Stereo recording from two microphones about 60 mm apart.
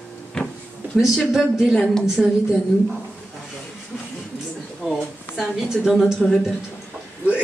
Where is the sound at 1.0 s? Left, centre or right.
Centre.